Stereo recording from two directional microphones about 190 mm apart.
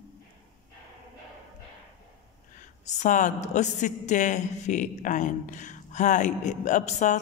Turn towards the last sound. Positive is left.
turn(degrees=40)  # may be behind; listen again after turning